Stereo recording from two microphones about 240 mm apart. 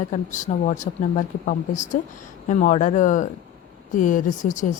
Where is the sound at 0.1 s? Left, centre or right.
Left.